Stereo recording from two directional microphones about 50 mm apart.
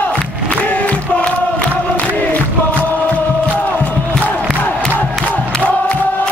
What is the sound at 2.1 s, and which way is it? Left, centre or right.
Music, left.